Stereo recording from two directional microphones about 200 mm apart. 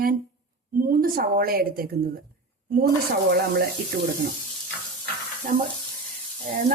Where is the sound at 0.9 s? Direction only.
45° right (ahead or behind).